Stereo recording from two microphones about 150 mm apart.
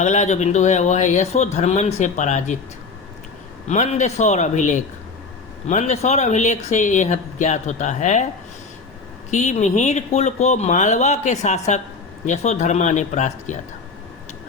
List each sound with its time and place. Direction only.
0.0 s speech: 50° left (ahead or behind)
3.7 s speech: 50° left (ahead or behind)
9.3 s speech: 55° left (ahead or behind)